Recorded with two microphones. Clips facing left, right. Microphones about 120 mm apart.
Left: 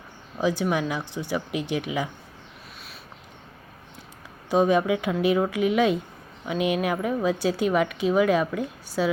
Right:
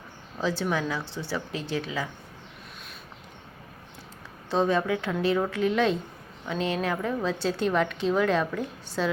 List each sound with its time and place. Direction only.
0.3 s a woman's voice: 15° left (ahead or behind)
4.4 s a woman's voice: 10° left (ahead or behind)